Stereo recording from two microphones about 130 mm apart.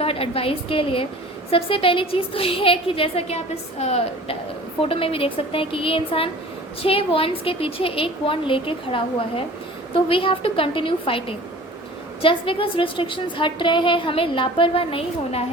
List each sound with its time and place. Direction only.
0.0 s a woman's voice: 50° left (ahead or behind)